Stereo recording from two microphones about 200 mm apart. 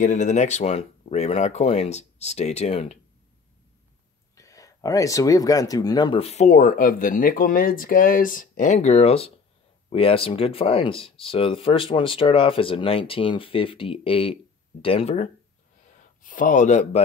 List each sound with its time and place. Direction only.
0.0 s speech: 40° left (ahead or behind)
4.4 s speech: 15° left (ahead or behind)
16.2 s speech: 40° left (ahead or behind)